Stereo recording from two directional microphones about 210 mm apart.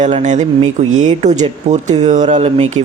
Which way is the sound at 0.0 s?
35° right (ahead or behind).